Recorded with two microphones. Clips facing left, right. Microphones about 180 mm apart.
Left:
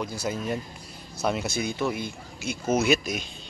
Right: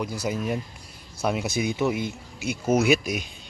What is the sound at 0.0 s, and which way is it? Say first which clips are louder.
Speech: right 2 dB; 15° right (ahead or behind).